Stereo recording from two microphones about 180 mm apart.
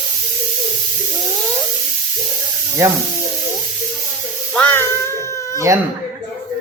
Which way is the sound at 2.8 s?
15° right (ahead or behind).